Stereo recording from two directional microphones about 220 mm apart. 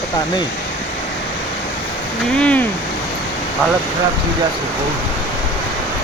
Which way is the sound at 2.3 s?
5° left (ahead or behind).